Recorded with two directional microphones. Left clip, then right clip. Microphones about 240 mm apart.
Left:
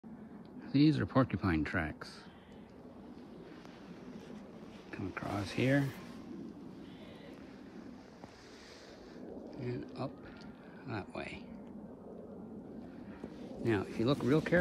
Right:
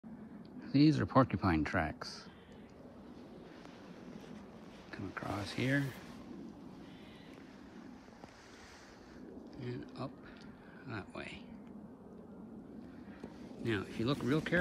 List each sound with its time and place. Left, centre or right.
0.6 s speech: centre
4.9 s speech: centre
9.8 s speech: centre
13.2 s speech: centre